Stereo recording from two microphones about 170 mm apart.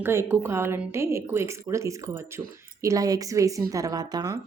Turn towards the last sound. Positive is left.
turn(degrees=-20)  # may be behind; listen again after turning